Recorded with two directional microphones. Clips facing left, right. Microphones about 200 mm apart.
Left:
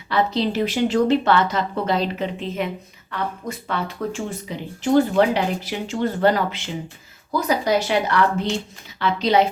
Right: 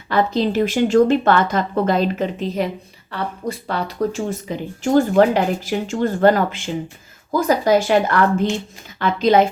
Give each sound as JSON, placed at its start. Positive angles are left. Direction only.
{"t": 0.1, "sound": "speech", "side_deg": -50}